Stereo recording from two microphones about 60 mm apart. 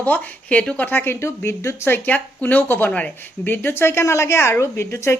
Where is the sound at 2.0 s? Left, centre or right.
Left.